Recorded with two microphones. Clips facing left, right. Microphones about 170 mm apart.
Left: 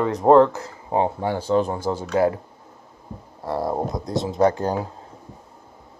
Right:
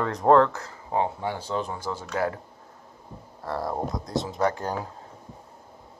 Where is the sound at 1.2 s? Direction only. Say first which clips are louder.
Left 8 dB; 45° left (ahead or behind).